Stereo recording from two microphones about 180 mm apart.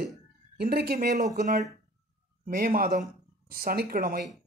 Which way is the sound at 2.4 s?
55° right (ahead or behind).